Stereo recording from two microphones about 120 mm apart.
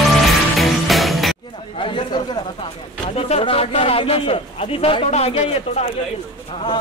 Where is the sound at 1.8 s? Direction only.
45° left (ahead or behind).